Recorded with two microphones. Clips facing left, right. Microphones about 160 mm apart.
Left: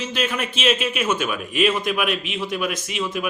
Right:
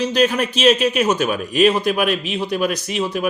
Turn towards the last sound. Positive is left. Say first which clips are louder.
# right 5 dB
turn(degrees=-35)  # may be behind; listen again after turning